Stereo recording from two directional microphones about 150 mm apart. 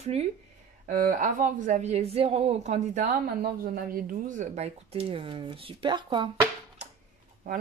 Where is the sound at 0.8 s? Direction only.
60° right (ahead or behind); by 6.2 s 30° right (ahead or behind).